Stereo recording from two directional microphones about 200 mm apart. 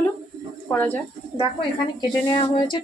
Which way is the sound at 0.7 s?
10° left (ahead or behind).